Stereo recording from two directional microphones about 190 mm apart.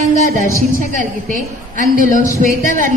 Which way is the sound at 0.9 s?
45° left (ahead or behind).